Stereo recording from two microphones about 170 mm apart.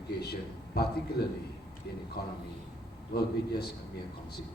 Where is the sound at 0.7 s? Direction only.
70° left (ahead or behind).